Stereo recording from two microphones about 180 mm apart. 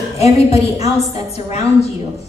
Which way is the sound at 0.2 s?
35° left (ahead or behind).